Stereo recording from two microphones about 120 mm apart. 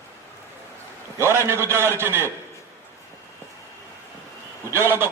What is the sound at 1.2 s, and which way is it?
A man's voice, 20° right (ahead or behind).